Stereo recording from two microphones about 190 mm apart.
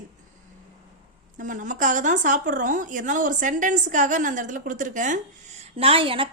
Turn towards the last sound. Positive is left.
turn(degrees=-30)  # may be behind; listen again after turning